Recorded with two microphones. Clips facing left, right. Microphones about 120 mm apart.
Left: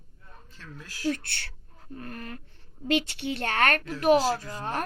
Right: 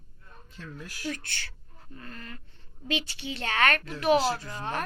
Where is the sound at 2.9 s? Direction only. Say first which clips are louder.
Left 6 dB; 60° left (ahead or behind).